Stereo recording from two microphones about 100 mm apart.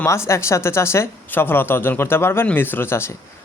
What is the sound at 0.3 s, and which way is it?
Speech, 30° left (ahead or behind).